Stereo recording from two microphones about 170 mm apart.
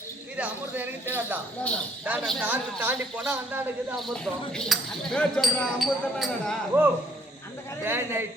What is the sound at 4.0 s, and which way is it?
Speech, centre (ahead or behind).